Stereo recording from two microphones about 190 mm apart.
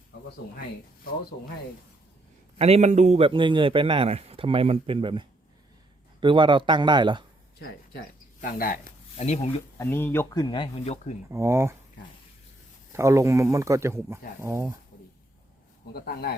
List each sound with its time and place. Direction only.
2.6 s a man's voice: 30° right (ahead or behind)
7.6 s speech: 50° left (ahead or behind); by 9.5 s 35° left (ahead or behind)
9.7 s speech: 10° left (ahead or behind); by 10.9 s 25° left (ahead or behind)
11.3 s speech: 15° right (ahead or behind)
12.9 s speech: 15° right (ahead or behind)
15.9 s speech: 55° left (ahead or behind)